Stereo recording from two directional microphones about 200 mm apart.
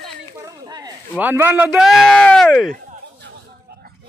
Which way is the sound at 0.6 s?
20° right (ahead or behind).